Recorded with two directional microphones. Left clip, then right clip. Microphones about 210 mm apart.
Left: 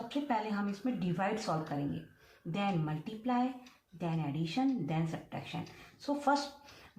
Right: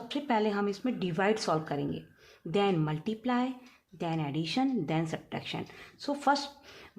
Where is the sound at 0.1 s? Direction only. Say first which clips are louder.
Right 6 dB; 45° right (ahead or behind).